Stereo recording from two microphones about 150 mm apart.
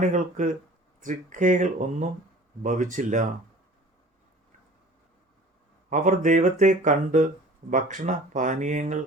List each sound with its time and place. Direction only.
0.0 s speech: 55° right (ahead or behind)
5.9 s speech: 60° right (ahead or behind)